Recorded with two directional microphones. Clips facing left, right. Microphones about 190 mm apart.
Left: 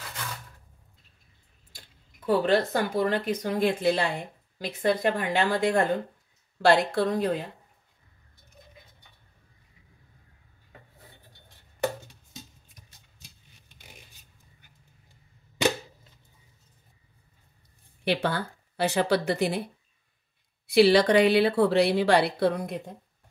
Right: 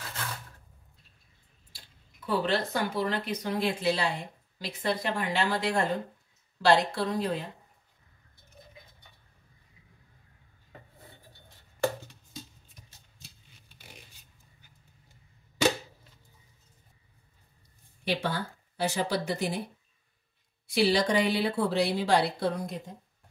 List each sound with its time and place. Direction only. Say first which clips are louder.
1.7 s a woman's voice: left 4 dB; 45° left (ahead or behind)
18.0 s speech: left 4 dB; 60° left (ahead or behind)
20.6 s a woman's voice: left 7 dB; 65° left (ahead or behind)